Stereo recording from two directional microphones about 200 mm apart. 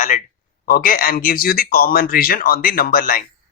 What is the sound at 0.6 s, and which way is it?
A man's voice, 45° left (ahead or behind).